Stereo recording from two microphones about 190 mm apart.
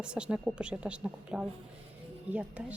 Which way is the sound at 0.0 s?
5° right (ahead or behind).